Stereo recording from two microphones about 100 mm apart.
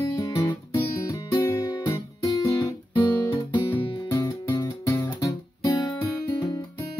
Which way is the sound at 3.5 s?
50° left (ahead or behind).